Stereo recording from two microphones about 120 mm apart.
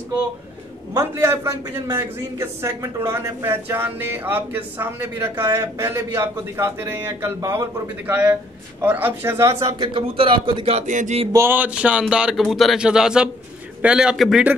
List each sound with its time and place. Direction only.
0.9 s a man's voice: 20° right (ahead or behind)
9.8 s speech: 45° right (ahead or behind); by 11.1 s 80° right
11.3 s a man's voice: 15° right (ahead or behind)